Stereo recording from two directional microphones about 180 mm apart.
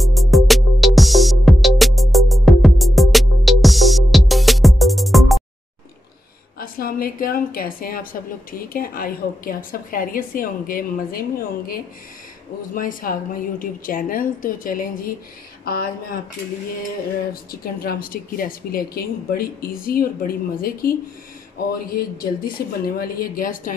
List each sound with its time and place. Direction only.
0.0 s music: centre (ahead or behind)
6.6 s a woman's voice: 55° left (ahead or behind)
15.6 s a sound: 55° left (ahead or behind)
17.3 s a woman's voice: 55° left (ahead or behind)